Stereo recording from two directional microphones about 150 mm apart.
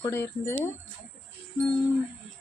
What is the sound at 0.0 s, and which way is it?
Speech, 15° left (ahead or behind).